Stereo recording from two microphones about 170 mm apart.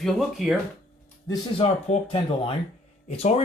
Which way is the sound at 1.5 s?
35° left (ahead or behind).